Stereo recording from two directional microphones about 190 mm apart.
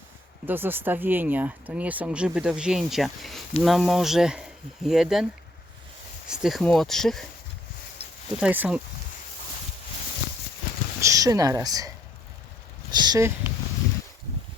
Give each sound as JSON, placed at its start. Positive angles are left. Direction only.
{"t": 0.4, "sound": "speech", "side_deg": -10}
{"t": 6.2, "sound": "speech", "side_deg": -5}
{"t": 8.4, "sound": "speech", "side_deg": -10}
{"t": 11.0, "sound": "speech", "side_deg": -15}